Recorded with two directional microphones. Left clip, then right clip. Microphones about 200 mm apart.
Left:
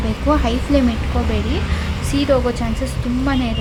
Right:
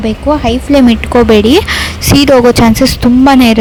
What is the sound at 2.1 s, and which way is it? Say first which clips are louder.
A woman's voice: right 12 dB; 50° right (ahead or behind).